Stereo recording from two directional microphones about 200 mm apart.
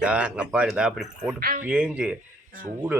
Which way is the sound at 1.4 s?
45° right (ahead or behind).